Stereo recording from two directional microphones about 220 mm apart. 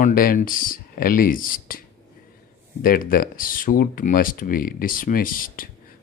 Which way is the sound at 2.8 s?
40° left (ahead or behind).